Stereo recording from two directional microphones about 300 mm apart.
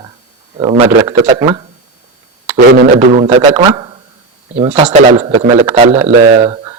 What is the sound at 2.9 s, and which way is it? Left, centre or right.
Speech, centre.